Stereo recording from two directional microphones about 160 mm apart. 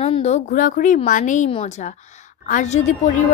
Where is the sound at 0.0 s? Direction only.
40° left (ahead or behind).